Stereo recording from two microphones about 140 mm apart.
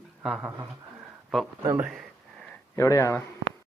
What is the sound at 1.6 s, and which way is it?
Speech, 20° right (ahead or behind).